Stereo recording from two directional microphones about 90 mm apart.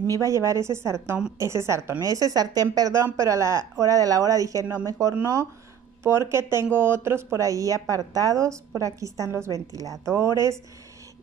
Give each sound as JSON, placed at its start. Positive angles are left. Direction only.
{"t": 0.1, "sound": "a woman's voice", "side_deg": -40}